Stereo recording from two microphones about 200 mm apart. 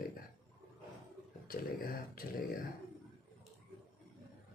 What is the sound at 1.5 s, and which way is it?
Speech, 45° left (ahead or behind).